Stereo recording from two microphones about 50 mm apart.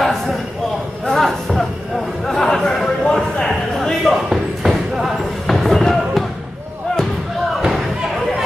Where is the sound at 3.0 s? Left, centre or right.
Left.